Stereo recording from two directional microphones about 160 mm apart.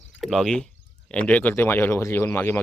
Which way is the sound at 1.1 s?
10° left (ahead or behind).